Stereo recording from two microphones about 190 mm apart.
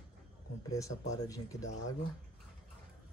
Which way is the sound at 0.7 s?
15° left (ahead or behind).